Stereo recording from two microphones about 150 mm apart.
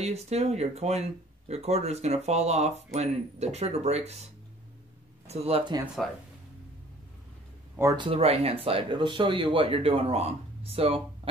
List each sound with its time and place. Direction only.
0.0 s speech: 45° right (ahead or behind)
5.2 s speech: 45° right (ahead or behind)
7.9 s speech: 35° right (ahead or behind)